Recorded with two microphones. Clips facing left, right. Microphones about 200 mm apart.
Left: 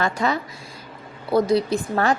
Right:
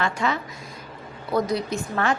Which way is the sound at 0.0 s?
35° left (ahead or behind).